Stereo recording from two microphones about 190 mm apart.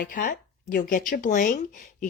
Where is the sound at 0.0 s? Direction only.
45° left (ahead or behind).